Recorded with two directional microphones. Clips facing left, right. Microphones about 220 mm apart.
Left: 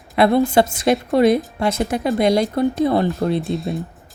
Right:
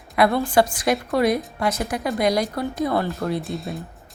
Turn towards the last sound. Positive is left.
turn(degrees=0)  # may be behind; listen again after turning